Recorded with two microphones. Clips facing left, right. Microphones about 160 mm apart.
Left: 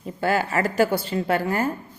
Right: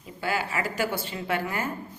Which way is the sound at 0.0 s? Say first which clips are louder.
Left 7 dB; 45° left (ahead or behind).